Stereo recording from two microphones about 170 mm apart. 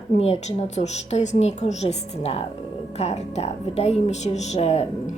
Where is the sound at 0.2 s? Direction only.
40° left (ahead or behind).